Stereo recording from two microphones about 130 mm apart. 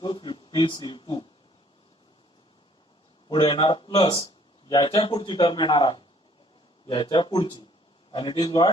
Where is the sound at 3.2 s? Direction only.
35° left (ahead or behind).